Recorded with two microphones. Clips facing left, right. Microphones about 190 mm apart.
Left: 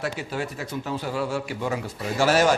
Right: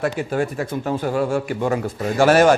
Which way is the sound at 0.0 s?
50° right (ahead or behind).